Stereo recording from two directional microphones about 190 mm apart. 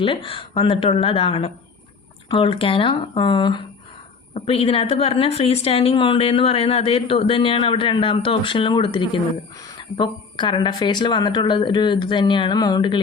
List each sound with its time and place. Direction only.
0.0 s a woman's voice: 30° left (ahead or behind)